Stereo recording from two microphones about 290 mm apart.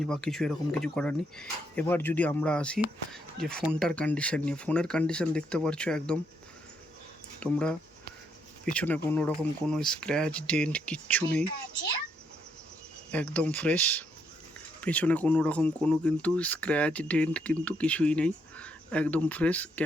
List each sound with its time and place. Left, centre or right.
0.0 s speech: centre
7.3 s speech: centre
13.1 s speech: centre